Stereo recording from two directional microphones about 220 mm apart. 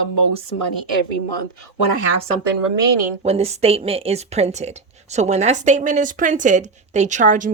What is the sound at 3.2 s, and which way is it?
A woman's voice, 30° right (ahead or behind).